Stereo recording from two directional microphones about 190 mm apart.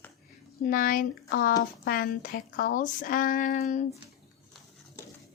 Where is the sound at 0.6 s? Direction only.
45° left (ahead or behind).